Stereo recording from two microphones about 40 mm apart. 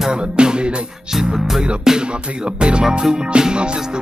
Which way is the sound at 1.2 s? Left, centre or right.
Centre.